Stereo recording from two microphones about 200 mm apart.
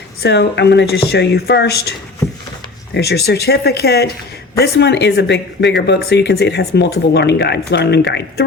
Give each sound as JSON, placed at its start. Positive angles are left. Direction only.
{"t": 0.2, "sound": "speech", "side_deg": 55}